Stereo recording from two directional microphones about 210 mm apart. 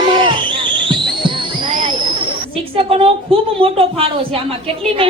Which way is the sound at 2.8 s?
25° right (ahead or behind).